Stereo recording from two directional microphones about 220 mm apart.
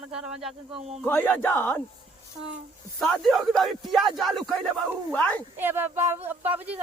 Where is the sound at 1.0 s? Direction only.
10° left (ahead or behind).